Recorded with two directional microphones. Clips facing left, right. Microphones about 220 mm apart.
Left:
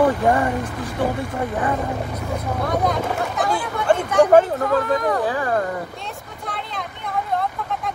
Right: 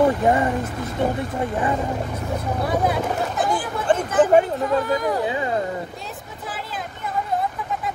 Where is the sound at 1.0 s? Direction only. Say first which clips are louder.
Even; 20° right (ahead or behind).